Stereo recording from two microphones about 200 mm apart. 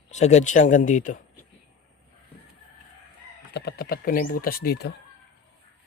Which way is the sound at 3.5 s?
50° left (ahead or behind).